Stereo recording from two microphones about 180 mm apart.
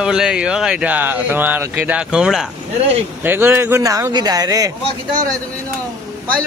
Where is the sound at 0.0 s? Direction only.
5° right (ahead or behind); by 4.7 s 20° right (ahead or behind).